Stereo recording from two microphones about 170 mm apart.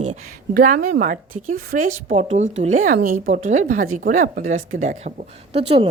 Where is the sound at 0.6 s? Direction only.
70° right (ahead or behind).